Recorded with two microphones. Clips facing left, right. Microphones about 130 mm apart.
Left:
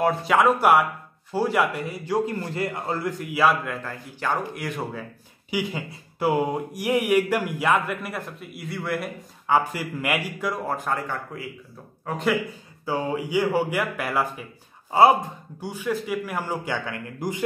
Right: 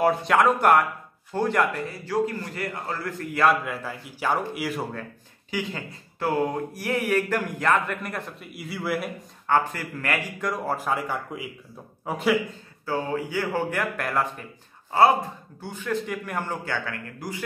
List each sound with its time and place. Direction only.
0.0 s a man's voice: centre (ahead or behind)
5.5 s a man's voice: 10° left (ahead or behind)
9.5 s a man's voice: 10° left (ahead or behind)
10.4 s speech: centre (ahead or behind)
12.8 s a man's voice: 15° left (ahead or behind)